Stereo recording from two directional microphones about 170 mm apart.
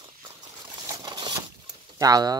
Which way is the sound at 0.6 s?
25° right (ahead or behind).